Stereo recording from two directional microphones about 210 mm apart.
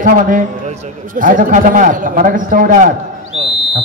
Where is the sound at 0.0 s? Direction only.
40° right (ahead or behind).